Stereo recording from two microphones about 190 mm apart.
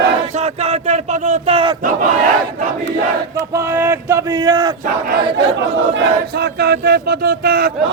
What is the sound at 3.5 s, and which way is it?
Speech, 15° right (ahead or behind).